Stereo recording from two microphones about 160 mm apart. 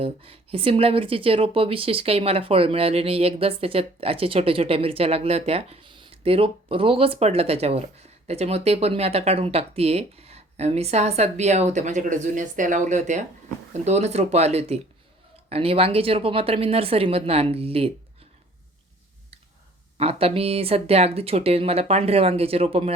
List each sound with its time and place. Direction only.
0.0 s speech: 35° right (ahead or behind)
20.0 s speech: 40° right (ahead or behind)